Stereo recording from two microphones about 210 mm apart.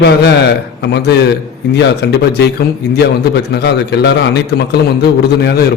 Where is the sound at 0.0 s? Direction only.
55° left (ahead or behind).